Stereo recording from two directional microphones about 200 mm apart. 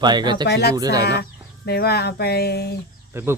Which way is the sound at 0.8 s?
20° right (ahead or behind).